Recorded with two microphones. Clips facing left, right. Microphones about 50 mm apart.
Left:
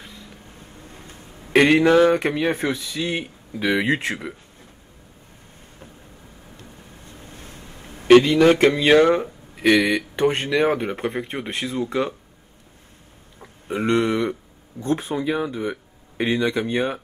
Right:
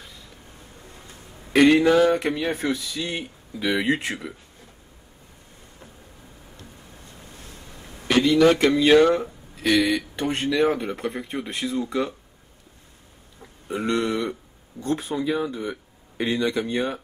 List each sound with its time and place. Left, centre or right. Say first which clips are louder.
0.6 s a sound: left 2 dB; centre
1.5 s speech: left 1 dB; left
7.1 s vehicle: left 4 dB; left
7.6 s a sound: left 2 dB; centre
8.2 s speech: left 2 dB; left
13.4 s speech: left 3 dB; left